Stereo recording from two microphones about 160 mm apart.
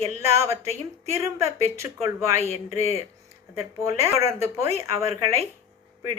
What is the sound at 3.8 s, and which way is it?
Speech, 20° right (ahead or behind).